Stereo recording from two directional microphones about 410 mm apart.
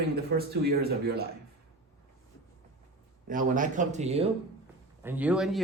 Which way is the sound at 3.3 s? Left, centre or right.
Centre.